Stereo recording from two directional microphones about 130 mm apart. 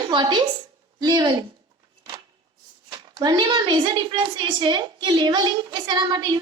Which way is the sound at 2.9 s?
30° right (ahead or behind).